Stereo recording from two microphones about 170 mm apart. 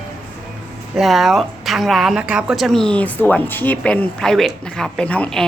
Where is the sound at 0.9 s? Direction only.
Centre (ahead or behind).